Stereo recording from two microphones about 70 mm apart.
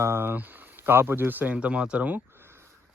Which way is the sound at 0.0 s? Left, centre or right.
Right.